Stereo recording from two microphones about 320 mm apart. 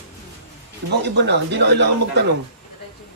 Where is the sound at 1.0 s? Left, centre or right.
Right.